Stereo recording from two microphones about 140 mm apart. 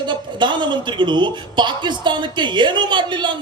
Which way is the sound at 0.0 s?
35° right (ahead or behind).